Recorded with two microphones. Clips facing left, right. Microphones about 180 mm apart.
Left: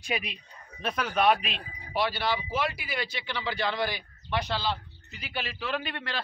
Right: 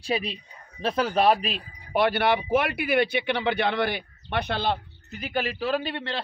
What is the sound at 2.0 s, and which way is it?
Speech, 55° right (ahead or behind).